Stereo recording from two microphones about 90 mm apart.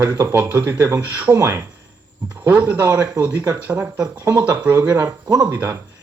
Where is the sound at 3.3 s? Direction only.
35° right (ahead or behind).